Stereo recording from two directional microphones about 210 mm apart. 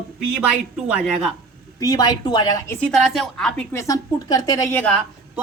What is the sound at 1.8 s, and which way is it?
A woman's voice, 20° left (ahead or behind).